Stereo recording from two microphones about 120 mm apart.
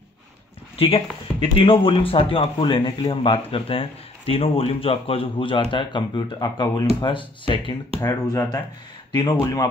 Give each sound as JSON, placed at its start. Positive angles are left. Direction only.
{"t": 0.7, "sound": "speech", "side_deg": 50}
{"t": 8.0, "sound": "speech", "side_deg": 25}
{"t": 9.1, "sound": "speech", "side_deg": 35}
{"t": 9.4, "sound": "speech", "side_deg": 25}